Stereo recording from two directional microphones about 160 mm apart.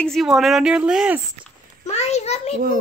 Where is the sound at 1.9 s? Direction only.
40° left (ahead or behind).